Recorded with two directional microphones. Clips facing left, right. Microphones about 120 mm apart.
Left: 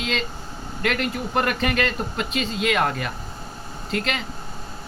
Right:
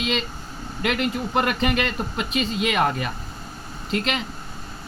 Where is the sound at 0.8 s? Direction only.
10° right (ahead or behind).